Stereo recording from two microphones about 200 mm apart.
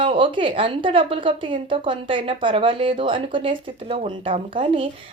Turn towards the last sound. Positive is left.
turn(degrees=-25)  # may be behind; listen again after turning